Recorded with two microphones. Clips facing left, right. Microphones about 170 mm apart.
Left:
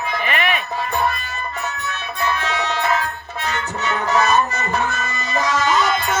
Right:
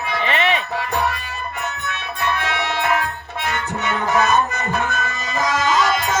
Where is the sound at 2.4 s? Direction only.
60° right (ahead or behind).